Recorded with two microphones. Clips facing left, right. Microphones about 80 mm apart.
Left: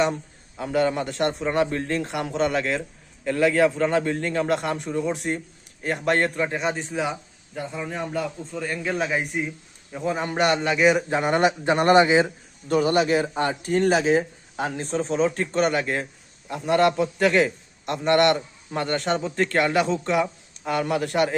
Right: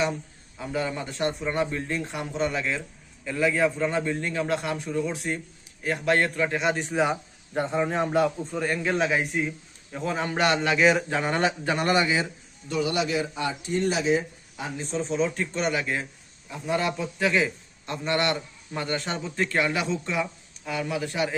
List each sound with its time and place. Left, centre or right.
0.0 s a man's voice: left
1.4 s speech: left
4.0 s a man's voice: left
6.9 s speech: right
7.5 s a man's voice: right
8.5 s a man's voice: centre
11.1 s a man's voice: centre; by 16.0 s left
16.5 s a man's voice: left